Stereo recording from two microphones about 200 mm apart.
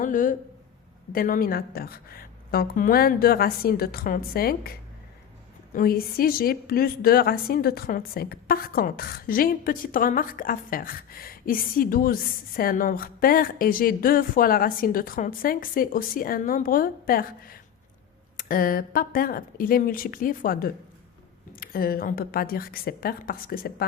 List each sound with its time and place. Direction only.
0.0 s a woman's voice: 40° left (ahead or behind)
5.7 s a woman's voice: 50° left (ahead or behind)